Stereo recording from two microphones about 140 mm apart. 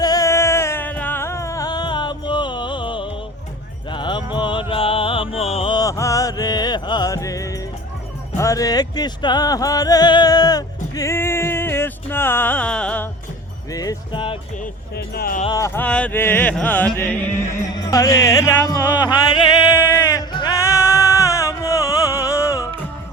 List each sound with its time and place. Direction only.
0.0 s music: 25° left (ahead or behind); by 5.7 s 45° left (ahead or behind)
5.7 s music: 25° left (ahead or behind); by 13.1 s 10° left (ahead or behind)
13.7 s speech: 30° left (ahead or behind)
15.1 s speech: 90° left
15.5 s music: 20° left (ahead or behind)
17.7 s music: 25° left (ahead or behind)
19.7 s music: 20° left (ahead or behind)